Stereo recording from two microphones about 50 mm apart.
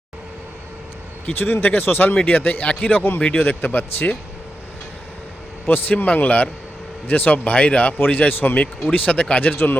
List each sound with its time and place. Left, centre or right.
1.4 s speech: left
5.6 s speech: left